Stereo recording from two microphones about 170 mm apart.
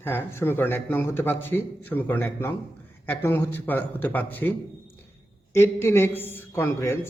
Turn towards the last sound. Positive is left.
turn(degrees=15)  # may be behind; listen again after turning